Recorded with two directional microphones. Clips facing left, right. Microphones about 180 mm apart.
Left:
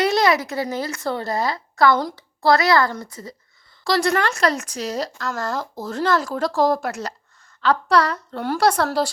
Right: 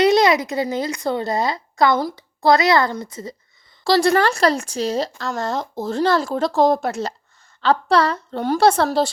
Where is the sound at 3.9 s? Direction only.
30° right (ahead or behind).